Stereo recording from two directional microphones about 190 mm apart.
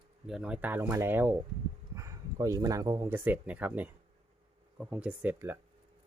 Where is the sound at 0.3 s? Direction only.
5° right (ahead or behind).